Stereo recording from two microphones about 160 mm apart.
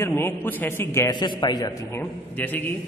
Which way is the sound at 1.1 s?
30° left (ahead or behind).